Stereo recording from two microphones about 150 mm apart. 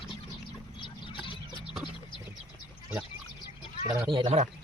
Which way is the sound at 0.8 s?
30° left (ahead or behind).